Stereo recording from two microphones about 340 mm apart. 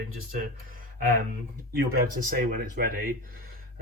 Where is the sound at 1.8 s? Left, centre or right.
Right.